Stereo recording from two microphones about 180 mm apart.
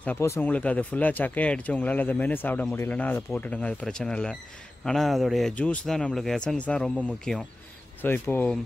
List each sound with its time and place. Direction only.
0.0 s speech: 15° left (ahead or behind)